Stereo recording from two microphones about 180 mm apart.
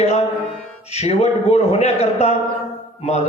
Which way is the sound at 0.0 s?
35° left (ahead or behind).